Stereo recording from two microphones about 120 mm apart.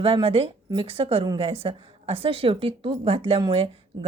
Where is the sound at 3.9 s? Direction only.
40° right (ahead or behind).